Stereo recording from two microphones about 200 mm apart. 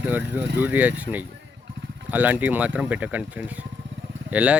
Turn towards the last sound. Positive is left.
turn(degrees=-5)  # may be behind; listen again after turning